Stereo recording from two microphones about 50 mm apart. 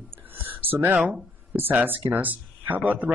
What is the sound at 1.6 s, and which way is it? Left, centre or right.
A man's voice, right.